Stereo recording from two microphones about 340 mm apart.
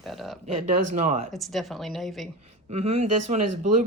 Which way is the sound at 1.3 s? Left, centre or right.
Centre.